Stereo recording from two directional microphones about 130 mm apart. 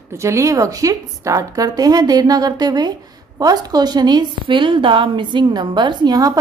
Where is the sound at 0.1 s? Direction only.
20° right (ahead or behind).